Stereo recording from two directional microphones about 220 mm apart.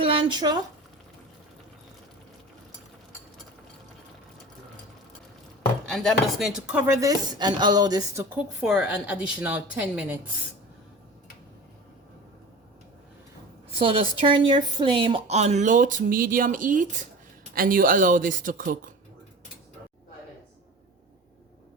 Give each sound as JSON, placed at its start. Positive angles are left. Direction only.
{"t": 0.0, "sound": "a sound", "side_deg": -20}
{"t": 5.9, "sound": "speech", "side_deg": 0}
{"t": 13.7, "sound": "speech", "side_deg": -25}